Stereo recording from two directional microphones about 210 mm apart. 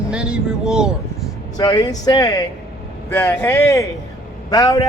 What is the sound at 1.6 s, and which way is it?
A man's voice, 20° left (ahead or behind).